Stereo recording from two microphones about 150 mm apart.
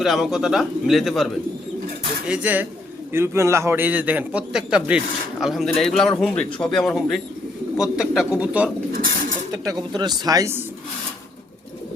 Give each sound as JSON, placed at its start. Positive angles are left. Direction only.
{"t": 0.0, "sound": "a man's voice", "side_deg": 0}
{"t": 8.9, "sound": "a sound", "side_deg": -70}
{"t": 9.5, "sound": "speech", "side_deg": -25}